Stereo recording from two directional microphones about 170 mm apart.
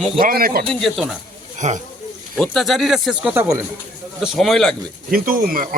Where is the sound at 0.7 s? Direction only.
Centre (ahead or behind).